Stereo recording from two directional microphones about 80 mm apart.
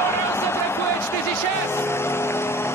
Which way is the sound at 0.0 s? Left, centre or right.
Left.